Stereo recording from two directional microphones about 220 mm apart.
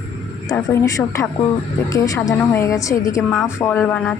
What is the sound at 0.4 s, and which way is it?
A woman's voice, 10° left (ahead or behind).